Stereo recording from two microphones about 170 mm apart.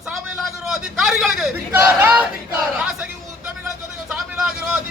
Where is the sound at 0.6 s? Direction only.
Centre (ahead or behind).